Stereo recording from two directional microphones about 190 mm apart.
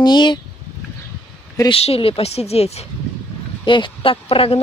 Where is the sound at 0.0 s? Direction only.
25° left (ahead or behind).